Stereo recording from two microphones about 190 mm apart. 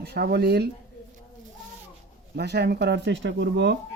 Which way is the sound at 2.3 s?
60° right (ahead or behind).